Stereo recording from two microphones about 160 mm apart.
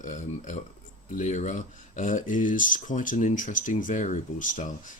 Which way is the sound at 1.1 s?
50° left (ahead or behind).